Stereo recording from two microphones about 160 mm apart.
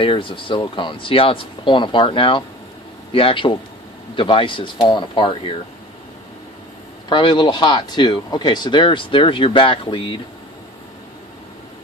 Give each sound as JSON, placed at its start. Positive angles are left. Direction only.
{"t": 0.0, "sound": "speech", "side_deg": 35}
{"t": 7.1, "sound": "speech", "side_deg": 30}